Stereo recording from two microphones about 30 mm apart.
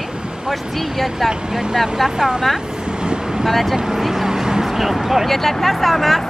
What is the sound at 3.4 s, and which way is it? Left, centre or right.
Speech, centre.